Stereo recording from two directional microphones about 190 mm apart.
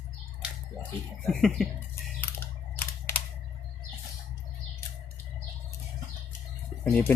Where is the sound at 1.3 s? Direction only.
Centre (ahead or behind).